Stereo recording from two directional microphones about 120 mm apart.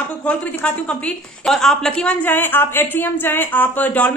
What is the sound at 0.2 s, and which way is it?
A woman's voice, 10° left (ahead or behind).